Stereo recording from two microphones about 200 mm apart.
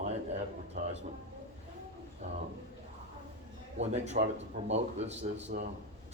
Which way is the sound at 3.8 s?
35° right (ahead or behind).